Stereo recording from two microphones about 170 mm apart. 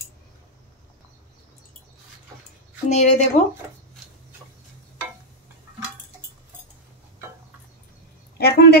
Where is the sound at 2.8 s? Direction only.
45° left (ahead or behind).